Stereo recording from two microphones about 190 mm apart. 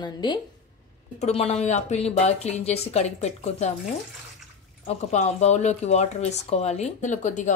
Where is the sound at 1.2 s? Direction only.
35° left (ahead or behind).